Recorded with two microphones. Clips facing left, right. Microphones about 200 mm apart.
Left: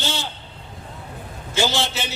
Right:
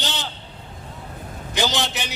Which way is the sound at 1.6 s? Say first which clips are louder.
Left 1 dB; 15° right (ahead or behind).